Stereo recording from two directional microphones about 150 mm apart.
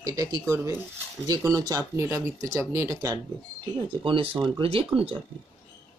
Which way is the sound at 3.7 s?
35° right (ahead or behind).